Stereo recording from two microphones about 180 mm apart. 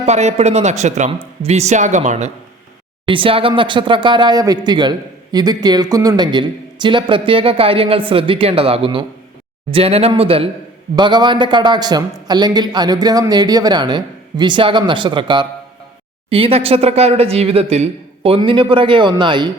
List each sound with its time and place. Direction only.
0.0 s speech: 40° right (ahead or behind)